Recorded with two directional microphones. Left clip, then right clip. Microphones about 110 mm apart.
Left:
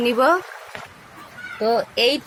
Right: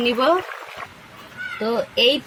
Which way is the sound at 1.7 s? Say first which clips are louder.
Even; 15° left (ahead or behind).